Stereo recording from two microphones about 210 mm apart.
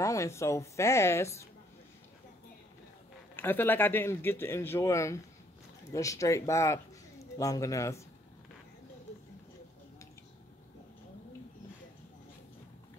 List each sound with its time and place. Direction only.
0.0 s a man's voice: 15° left (ahead or behind)
3.3 s a man's voice: 10° left (ahead or behind)